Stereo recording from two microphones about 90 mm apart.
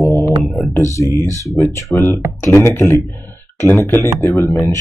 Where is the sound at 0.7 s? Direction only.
35° left (ahead or behind).